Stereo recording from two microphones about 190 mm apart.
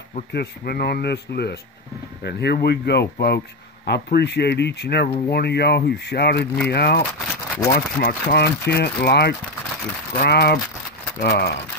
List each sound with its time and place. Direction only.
0.3 s speech: 55° left (ahead or behind)